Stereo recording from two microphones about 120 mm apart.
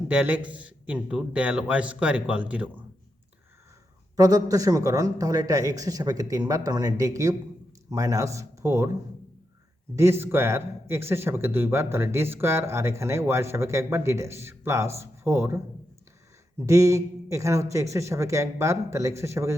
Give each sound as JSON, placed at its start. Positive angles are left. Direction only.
{"t": 0.1, "sound": "a man's voice", "side_deg": -15}
{"t": 4.2, "sound": "speech", "side_deg": -30}
{"t": 9.9, "sound": "speech", "side_deg": -20}